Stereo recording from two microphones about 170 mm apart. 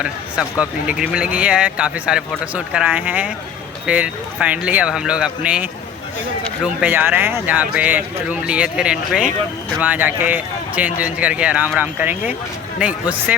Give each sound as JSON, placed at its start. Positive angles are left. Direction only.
{"t": 0.0, "sound": "speech", "side_deg": -5}
{"t": 6.8, "sound": "speech", "side_deg": -10}